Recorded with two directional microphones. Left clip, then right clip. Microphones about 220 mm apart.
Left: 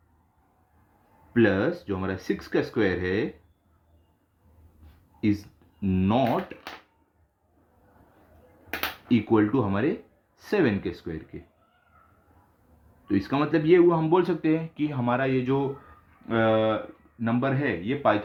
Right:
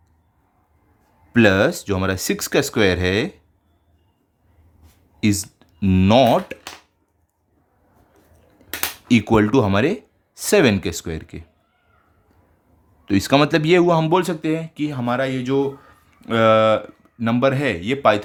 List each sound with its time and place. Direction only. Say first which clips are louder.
1.3 s speech: right 8 dB; 50° right (ahead or behind)
5.2 s speech: right 5 dB; 50° right (ahead or behind)
9.0 s speech: right 6 dB; 50° right (ahead or behind)
13.1 s speech: right 9 dB; 50° right (ahead or behind); by 15.6 s 25° right (ahead or behind)
16.2 s speech: right 8 dB; 40° right (ahead or behind)